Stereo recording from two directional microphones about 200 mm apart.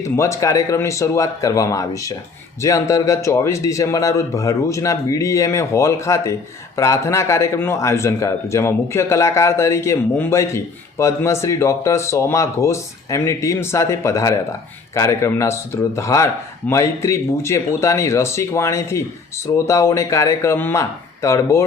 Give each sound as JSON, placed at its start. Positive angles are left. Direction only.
{"t": 0.0, "sound": "a man's voice", "side_deg": 15}